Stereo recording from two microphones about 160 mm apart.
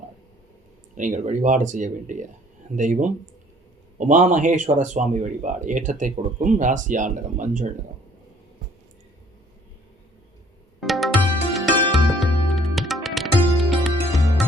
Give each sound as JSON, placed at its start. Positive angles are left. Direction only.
{"t": 0.9, "sound": "speech", "side_deg": -55}
{"t": 10.8, "sound": "music", "side_deg": 0}